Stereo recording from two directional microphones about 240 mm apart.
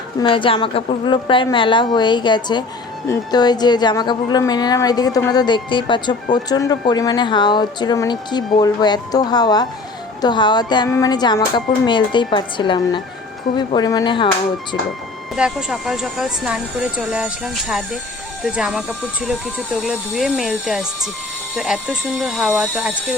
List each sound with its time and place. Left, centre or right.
0.2 s speech: left
15.4 s speech: centre